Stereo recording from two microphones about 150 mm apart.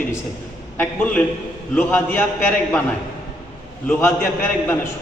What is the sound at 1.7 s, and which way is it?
Speech, 10° left (ahead or behind).